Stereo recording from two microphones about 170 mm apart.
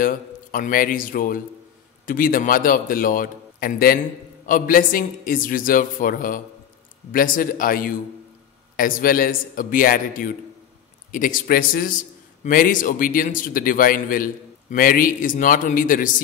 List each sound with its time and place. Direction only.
0.0 s a man's voice: 55° left (ahead or behind)